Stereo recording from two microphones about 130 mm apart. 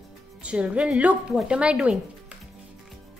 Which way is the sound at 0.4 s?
10° right (ahead or behind).